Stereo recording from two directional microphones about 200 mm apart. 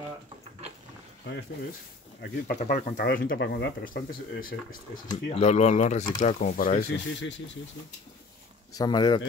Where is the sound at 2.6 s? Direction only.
35° left (ahead or behind).